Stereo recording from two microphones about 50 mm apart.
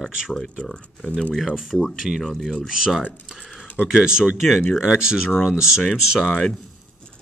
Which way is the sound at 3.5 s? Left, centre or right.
Left.